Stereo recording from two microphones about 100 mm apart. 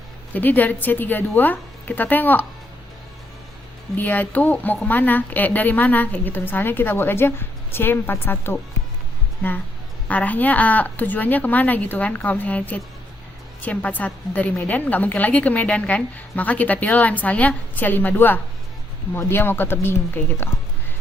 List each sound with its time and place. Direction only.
0.3 s a woman's voice: 15° left (ahead or behind)
3.9 s a woman's voice: 15° left (ahead or behind)